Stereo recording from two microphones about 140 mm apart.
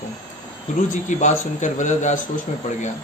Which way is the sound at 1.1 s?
60° left (ahead or behind).